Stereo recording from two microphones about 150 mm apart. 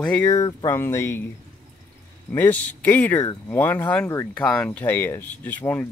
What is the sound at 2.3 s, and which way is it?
Speech, 15° left (ahead or behind).